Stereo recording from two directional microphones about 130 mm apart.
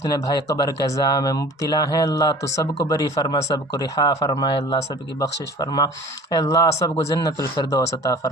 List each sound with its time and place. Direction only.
0.0 s speech: 30° left (ahead or behind)